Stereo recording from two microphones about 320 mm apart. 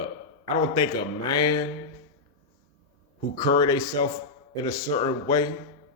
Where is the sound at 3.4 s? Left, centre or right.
Centre.